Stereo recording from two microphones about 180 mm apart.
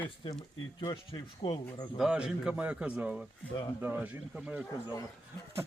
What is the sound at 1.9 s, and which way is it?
Speech, 5° right (ahead or behind).